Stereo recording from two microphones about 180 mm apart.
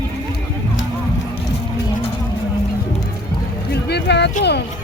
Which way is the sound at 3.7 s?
65° left (ahead or behind).